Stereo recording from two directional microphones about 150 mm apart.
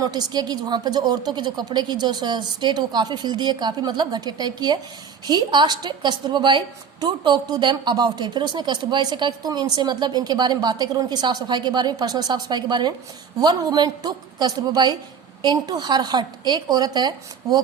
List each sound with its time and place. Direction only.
0.0 s a woman's voice: 25° right (ahead or behind)